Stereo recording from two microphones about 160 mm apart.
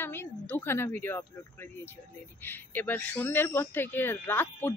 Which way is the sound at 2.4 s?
10° left (ahead or behind).